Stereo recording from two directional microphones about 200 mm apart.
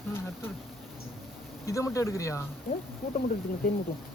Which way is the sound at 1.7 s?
15° left (ahead or behind).